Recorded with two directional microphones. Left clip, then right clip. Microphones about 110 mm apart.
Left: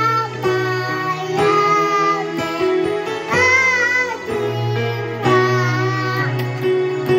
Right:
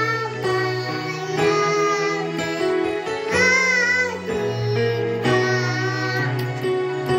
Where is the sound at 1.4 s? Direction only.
25° left (ahead or behind).